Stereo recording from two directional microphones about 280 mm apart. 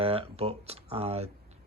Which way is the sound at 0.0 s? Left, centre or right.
Centre.